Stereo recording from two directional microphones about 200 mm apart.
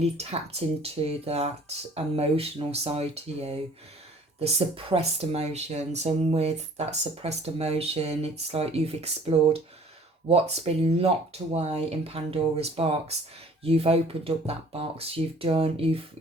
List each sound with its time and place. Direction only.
0.0 s speech: 30° right (ahead or behind)